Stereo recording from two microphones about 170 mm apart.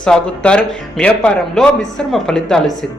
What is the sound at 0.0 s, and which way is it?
A woman's voice, 5° left (ahead or behind).